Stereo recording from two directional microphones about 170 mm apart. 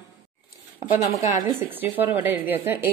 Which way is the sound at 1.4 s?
15° right (ahead or behind).